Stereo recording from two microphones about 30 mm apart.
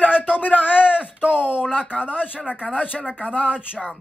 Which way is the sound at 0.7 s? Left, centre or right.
Left.